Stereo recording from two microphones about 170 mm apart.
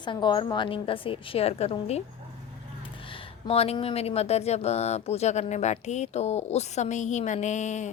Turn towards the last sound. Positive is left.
turn(degrees=45)  # may be behind; listen again after turning